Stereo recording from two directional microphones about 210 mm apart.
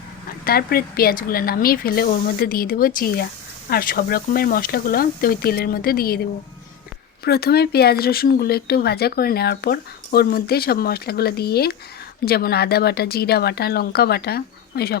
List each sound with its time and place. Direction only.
0.4 s speech: 45° left (ahead or behind)
7.3 s speech: 50° left (ahead or behind)